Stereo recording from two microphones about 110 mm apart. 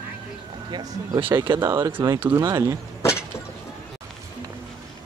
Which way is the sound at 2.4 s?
30° right (ahead or behind).